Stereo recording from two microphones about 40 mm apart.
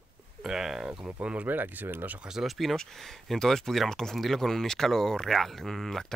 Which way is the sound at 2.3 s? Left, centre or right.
Centre.